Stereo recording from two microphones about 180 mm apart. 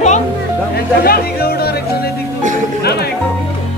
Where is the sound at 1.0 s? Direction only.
60° left (ahead or behind).